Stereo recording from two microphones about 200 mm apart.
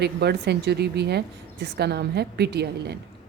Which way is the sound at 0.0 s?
55° right (ahead or behind).